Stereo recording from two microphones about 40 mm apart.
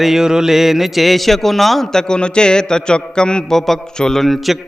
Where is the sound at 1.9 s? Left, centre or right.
Left.